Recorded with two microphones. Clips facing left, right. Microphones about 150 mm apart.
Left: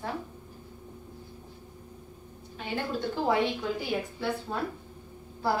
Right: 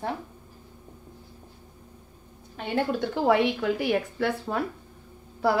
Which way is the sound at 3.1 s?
70° right (ahead or behind).